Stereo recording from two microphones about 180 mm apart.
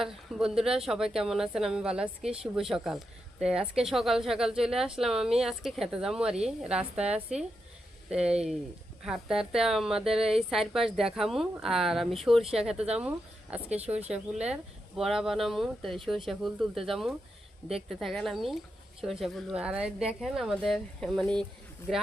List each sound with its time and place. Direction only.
0.0 s speech: 5° right (ahead or behind)
13.8 s speech: 35° right (ahead or behind)
14.1 s speech: 5° right (ahead or behind)